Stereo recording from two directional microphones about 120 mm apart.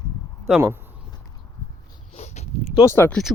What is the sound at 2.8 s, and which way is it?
Speech, 20° left (ahead or behind).